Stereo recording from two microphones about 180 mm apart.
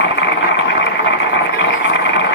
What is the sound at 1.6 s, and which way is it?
Vehicle, 85° left.